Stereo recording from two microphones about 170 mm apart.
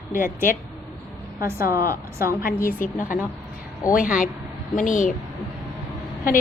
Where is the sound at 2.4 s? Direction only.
60° left (ahead or behind).